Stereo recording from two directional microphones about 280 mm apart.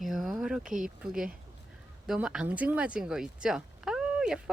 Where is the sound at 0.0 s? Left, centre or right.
Centre.